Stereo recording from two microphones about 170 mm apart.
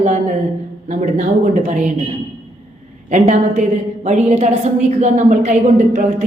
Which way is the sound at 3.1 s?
45° right (ahead or behind).